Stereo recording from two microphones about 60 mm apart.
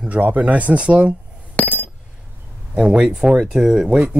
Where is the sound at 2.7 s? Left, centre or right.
Centre.